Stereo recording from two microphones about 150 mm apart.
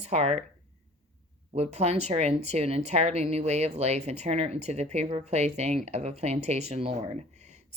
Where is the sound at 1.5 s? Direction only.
45° right (ahead or behind).